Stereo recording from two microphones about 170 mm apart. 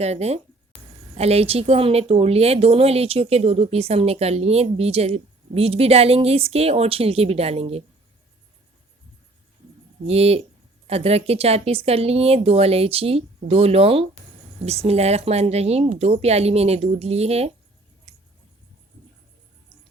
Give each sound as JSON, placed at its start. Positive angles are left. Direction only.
{"t": 0.0, "sound": "a woman's voice", "side_deg": -40}
{"t": 10.1, "sound": "a woman's voice", "side_deg": -35}
{"t": 18.1, "sound": "scissors", "side_deg": -35}